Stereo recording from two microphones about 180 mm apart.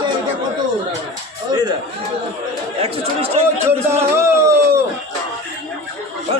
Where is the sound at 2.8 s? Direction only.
35° right (ahead or behind).